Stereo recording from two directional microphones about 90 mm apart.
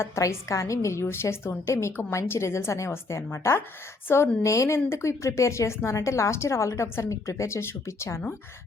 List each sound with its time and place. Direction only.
0.0 s a woman's voice: 35° left (ahead or behind)